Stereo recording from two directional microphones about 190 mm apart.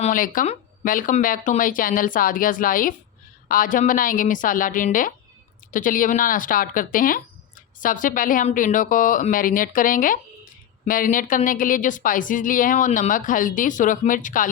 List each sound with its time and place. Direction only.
0.0 s speech: 45° left (ahead or behind)